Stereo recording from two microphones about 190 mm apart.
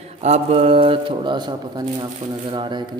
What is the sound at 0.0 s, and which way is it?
A man's voice, 35° right (ahead or behind).